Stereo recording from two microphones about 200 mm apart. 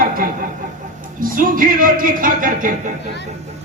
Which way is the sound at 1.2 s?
45° right (ahead or behind).